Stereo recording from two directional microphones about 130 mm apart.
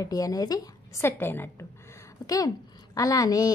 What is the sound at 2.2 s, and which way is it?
A woman's voice, 30° left (ahead or behind).